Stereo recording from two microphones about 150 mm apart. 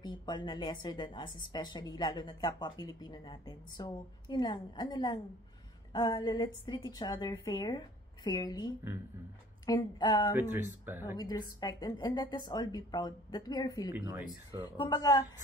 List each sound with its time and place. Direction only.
0.0 s a woman's voice: 30° left (ahead or behind)
10.3 s speech: 15° right (ahead or behind)
11.1 s a woman's voice: 30° left (ahead or behind)